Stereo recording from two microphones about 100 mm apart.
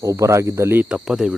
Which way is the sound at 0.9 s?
5° right (ahead or behind).